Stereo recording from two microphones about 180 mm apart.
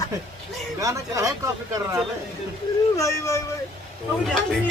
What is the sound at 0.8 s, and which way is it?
Speech, 20° right (ahead or behind).